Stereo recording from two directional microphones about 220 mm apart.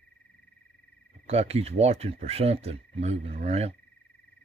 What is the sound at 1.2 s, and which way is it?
Speech, 30° right (ahead or behind).